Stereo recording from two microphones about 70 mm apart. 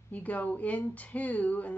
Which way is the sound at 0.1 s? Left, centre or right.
Left.